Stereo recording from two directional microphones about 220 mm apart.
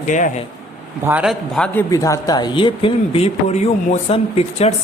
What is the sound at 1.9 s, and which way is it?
Speech, 15° left (ahead or behind).